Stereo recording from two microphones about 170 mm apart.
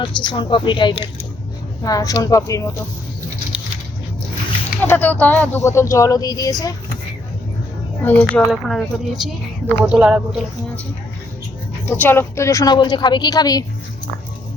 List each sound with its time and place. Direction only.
0.0 s a woman's voice: 25° left (ahead or behind)
4.9 s speech: 10° left (ahead or behind)
8.0 s speech: 10° left (ahead or behind); by 10.4 s 5° right (ahead or behind)
11.9 s a woman's voice: 15° left (ahead or behind)